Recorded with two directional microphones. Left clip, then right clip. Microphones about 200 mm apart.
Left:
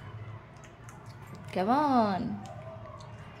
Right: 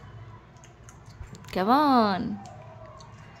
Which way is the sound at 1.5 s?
20° right (ahead or behind).